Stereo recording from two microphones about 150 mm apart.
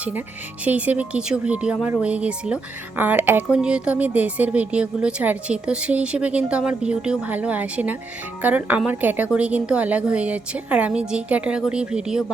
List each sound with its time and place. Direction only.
0.6 s speech: 10° right (ahead or behind)